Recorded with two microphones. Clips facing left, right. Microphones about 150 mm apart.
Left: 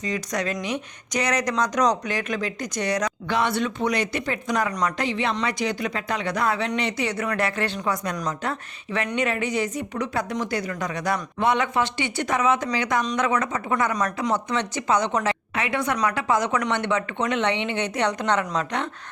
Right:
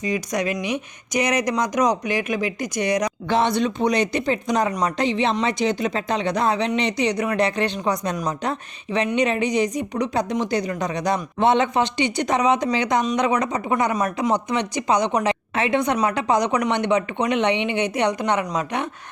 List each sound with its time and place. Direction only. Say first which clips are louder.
0.0 s speech: right 3 dB; 10° right (ahead or behind)
3.2 s speech: right 4 dB; 25° right (ahead or behind)